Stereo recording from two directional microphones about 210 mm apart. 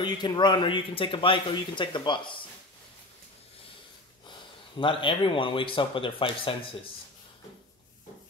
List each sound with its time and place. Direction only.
0.0 s speech: 20° left (ahead or behind)
4.7 s speech: 25° left (ahead or behind)